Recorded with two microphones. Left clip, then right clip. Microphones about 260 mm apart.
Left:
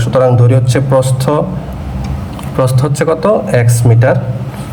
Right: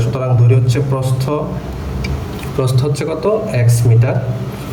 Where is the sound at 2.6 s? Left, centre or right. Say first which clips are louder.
Left 6 dB; centre.